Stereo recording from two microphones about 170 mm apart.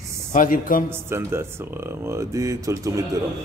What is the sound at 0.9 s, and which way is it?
Speech, 15° right (ahead or behind).